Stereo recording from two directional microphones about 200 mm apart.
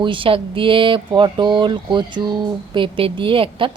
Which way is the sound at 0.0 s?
25° right (ahead or behind).